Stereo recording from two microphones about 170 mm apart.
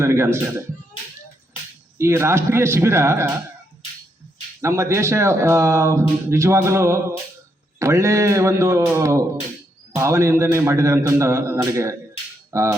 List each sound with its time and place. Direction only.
0.0 s speech: 15° right (ahead or behind)
2.0 s speech: 15° right (ahead or behind)
4.6 s speech: 15° right (ahead or behind)
12.5 s cap gun: 15° right (ahead or behind)